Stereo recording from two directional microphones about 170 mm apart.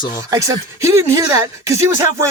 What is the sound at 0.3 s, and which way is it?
Speech, 20° right (ahead or behind).